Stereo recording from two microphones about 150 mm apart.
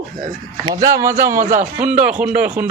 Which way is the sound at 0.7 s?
20° right (ahead or behind).